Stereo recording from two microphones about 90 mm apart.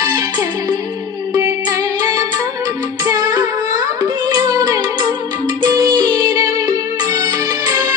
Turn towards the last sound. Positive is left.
turn(degrees=-45)  # may be behind; listen again after turning